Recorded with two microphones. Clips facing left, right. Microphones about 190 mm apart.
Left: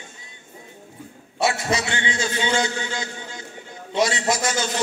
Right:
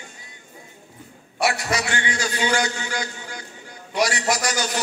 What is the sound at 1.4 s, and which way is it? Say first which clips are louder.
A man's voice: left 1 dB; 25° left (ahead or behind).